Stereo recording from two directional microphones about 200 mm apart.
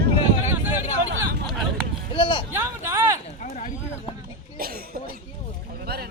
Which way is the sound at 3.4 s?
40° left (ahead or behind).